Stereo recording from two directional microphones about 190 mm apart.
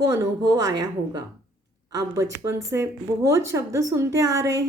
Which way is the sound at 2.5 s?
15° right (ahead or behind).